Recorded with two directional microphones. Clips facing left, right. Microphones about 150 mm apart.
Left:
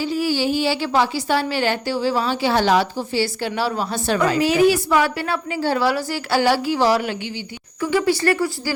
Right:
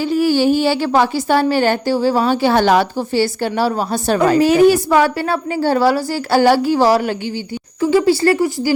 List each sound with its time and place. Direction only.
0.1 s a woman's voice: 55° right (ahead or behind)
7.8 s speech: 30° right (ahead or behind)